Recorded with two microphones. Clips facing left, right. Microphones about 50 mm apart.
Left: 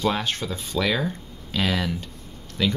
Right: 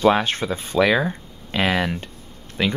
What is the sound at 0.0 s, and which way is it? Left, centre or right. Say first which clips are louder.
Speech: right 7 dB; right.